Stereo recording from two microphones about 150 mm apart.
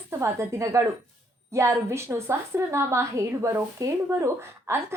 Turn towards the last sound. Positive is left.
turn(degrees=-15)  # may be behind; listen again after turning